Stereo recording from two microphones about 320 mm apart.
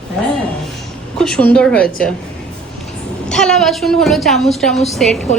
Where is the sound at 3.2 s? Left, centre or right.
Centre.